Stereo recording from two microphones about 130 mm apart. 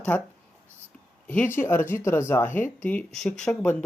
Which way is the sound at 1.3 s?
15° left (ahead or behind).